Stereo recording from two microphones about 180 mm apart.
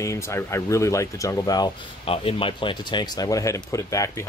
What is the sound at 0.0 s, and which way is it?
Speech, 15° left (ahead or behind).